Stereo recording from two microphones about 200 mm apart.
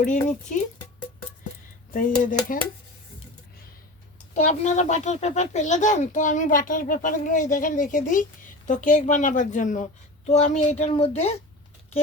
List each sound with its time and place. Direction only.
0.0 s speech: 40° left (ahead or behind)
1.9 s speech: 45° left (ahead or behind)
4.4 s speech: 35° left (ahead or behind)